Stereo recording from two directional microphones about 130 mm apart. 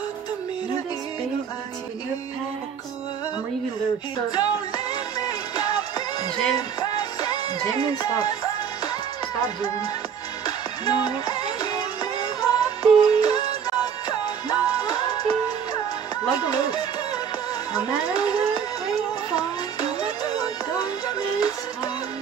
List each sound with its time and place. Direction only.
4.3 s music: 30° left (ahead or behind)
9.4 s music: 30° left (ahead or behind)
17.7 s a sound: 30° left (ahead or behind)
19.3 s music: 30° left (ahead or behind)